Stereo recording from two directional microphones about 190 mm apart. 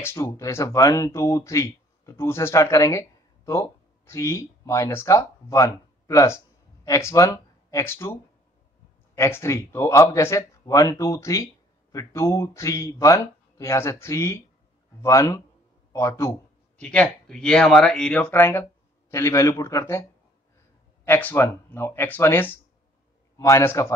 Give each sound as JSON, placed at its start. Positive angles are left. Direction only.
{"t": 0.0, "sound": "speech", "side_deg": 15}